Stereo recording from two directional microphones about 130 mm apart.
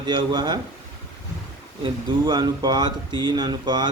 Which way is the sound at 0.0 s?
35° right (ahead or behind).